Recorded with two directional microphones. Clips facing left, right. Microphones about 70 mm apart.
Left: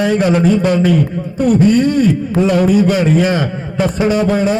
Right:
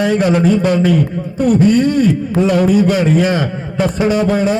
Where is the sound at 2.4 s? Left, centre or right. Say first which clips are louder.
Even; centre.